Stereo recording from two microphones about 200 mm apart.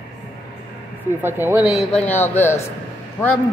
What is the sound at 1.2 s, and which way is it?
Speech, 10° right (ahead or behind).